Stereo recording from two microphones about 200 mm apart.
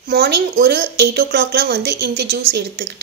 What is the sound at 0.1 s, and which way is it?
A woman's voice, 50° right (ahead or behind).